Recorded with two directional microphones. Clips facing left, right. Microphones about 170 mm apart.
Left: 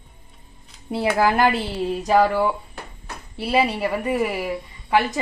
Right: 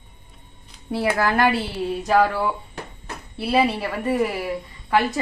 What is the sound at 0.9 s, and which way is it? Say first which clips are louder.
A woman's voice: left 2 dB; 20° left (ahead or behind).